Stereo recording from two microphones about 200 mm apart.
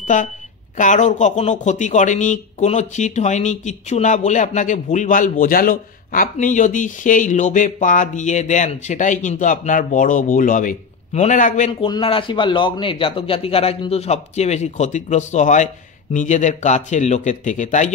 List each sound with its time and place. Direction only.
0.0 s a man's voice: 40° left (ahead or behind)
11.9 s a man's voice: 25° left (ahead or behind)